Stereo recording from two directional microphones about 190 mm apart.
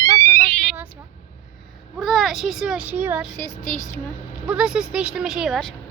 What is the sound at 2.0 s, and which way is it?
Speech, centre (ahead or behind).